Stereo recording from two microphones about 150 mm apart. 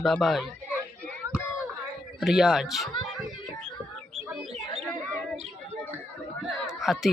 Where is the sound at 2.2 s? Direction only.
5° right (ahead or behind).